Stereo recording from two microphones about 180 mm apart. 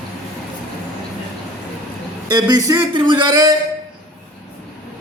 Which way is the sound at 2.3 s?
20° right (ahead or behind).